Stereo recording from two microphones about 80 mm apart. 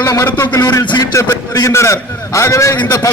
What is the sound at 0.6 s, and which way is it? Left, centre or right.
Speech, left.